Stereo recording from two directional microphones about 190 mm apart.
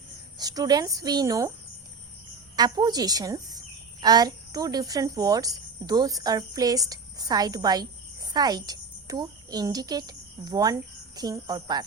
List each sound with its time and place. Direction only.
0.3 s speech: 20° right (ahead or behind)
2.6 s speech: 20° right (ahead or behind)